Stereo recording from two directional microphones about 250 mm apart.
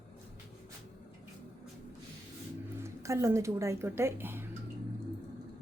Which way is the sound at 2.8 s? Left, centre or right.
Centre.